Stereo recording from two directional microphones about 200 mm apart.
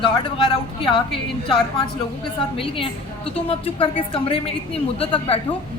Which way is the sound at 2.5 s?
25° left (ahead or behind).